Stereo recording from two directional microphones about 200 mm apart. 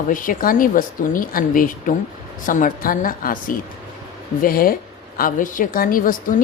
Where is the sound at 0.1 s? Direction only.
45° left (ahead or behind).